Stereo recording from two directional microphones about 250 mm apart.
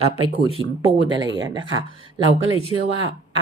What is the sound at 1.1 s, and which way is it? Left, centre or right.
Speech, centre.